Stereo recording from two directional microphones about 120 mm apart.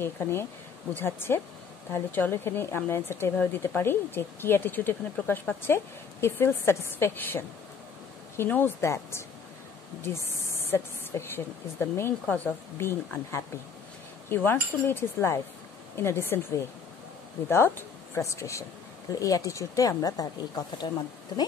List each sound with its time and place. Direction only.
0.0 s speech: 20° left (ahead or behind)